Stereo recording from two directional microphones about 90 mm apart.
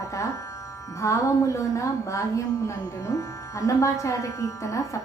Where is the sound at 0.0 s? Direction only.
35° left (ahead or behind).